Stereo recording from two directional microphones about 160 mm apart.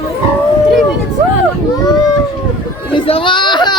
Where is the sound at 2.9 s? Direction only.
35° left (ahead or behind).